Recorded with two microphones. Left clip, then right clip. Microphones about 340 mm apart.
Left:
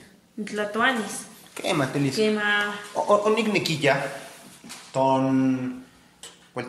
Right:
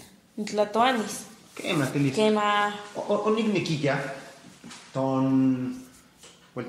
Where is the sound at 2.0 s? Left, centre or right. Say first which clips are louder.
Left 1 dB; centre.